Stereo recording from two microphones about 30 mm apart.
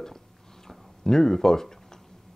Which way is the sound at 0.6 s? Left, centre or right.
Centre.